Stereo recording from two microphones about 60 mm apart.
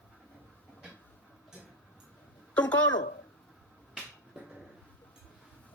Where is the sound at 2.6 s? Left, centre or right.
Left.